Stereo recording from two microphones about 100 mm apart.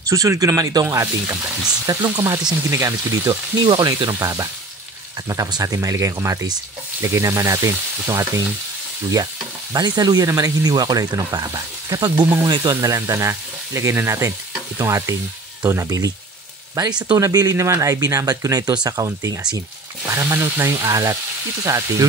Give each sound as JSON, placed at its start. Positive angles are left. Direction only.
{"t": 0.1, "sound": "stir", "side_deg": -35}
{"t": 1.9, "sound": "stir", "side_deg": -35}
{"t": 3.6, "sound": "speech", "side_deg": -50}
{"t": 5.3, "sound": "stir", "side_deg": -35}
{"t": 12.4, "sound": "speech", "side_deg": -45}
{"t": 15.6, "sound": "stir", "side_deg": -30}
{"t": 17.2, "sound": "stir", "side_deg": -35}
{"t": 20.1, "sound": "speech", "side_deg": -25}
{"t": 21.6, "sound": "stir", "side_deg": -35}